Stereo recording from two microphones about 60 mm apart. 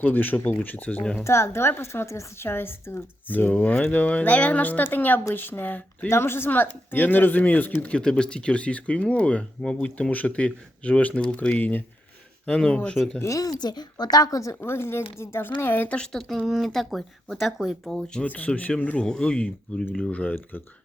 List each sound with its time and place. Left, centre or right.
0.0 s speech: left
1.2 s a woman's voice: left
6.1 s speech: left
12.5 s speech: centre
13.2 s speech: left
14.5 s speech: left
16.5 s speech: centre
17.8 s speech: centre
18.3 s speech: left